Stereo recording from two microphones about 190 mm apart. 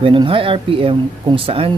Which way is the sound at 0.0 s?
25° right (ahead or behind).